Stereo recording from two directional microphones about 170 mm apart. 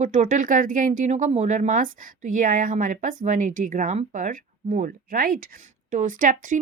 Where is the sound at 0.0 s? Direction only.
45° right (ahead or behind).